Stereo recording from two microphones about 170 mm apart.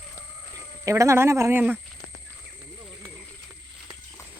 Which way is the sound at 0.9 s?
15° right (ahead or behind).